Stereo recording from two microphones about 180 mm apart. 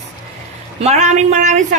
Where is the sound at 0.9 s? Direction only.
40° right (ahead or behind).